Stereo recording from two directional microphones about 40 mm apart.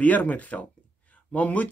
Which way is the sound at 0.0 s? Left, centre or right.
Left.